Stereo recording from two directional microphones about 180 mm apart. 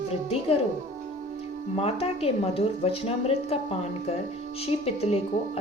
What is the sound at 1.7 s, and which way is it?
A woman's voice, 35° left (ahead or behind).